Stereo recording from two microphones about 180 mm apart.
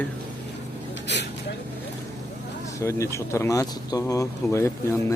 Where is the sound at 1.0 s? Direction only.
75° left (ahead or behind).